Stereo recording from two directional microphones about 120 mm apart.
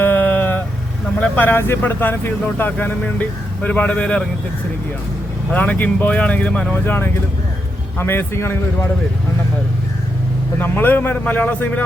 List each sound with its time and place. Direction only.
0.0 s vehicle: 15° left (ahead or behind)
1.2 s speech: 15° left (ahead or behind)
5.5 s a man's voice: 15° left (ahead or behind)
10.6 s speech: 15° left (ahead or behind)